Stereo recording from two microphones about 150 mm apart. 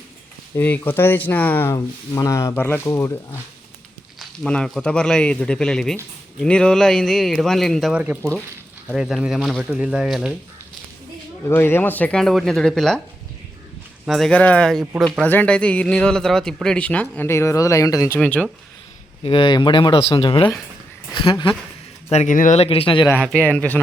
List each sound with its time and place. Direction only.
0.5 s a man's voice: 10° left (ahead or behind)
4.2 s speech: 5° left (ahead or behind)
7.9 s speech: 10° right (ahead or behind)
11.4 s speech: 15° left (ahead or behind)
14.0 s a man's voice: centre (ahead or behind); by 18.2 s 20° left (ahead or behind)
18.2 s speech: 5° left (ahead or behind)
19.2 s speech: 35° left (ahead or behind)
22.1 s speech: 55° left (ahead or behind); by 23.0 s 35° left (ahead or behind)
23.5 s a man's voice: 10° left (ahead or behind)